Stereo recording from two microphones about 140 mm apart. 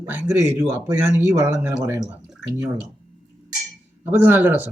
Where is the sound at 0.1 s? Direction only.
15° right (ahead or behind).